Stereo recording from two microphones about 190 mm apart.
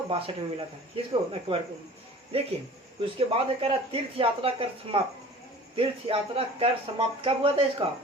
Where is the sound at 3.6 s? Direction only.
30° right (ahead or behind).